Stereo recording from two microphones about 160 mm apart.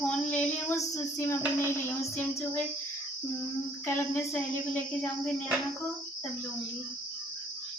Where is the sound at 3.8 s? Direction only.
15° left (ahead or behind).